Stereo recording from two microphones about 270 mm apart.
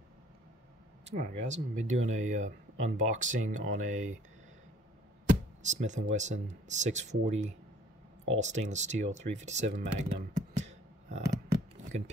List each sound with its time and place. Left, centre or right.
1.1 s speech: right
5.7 s speech: right